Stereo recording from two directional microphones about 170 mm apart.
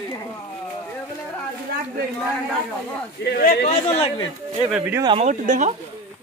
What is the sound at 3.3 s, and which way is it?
Speech, 65° left (ahead or behind).